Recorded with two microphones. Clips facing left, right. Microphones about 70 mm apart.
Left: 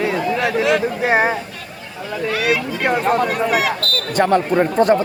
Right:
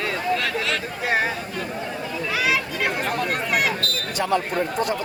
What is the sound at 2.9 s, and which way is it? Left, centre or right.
Speech, left.